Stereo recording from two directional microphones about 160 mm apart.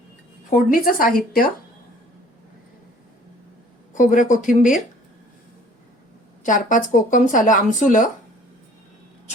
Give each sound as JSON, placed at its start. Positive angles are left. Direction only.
{"t": 0.5, "sound": "a woman's voice", "side_deg": 60}
{"t": 3.9, "sound": "speech", "side_deg": 55}
{"t": 6.4, "sound": "speech", "side_deg": 55}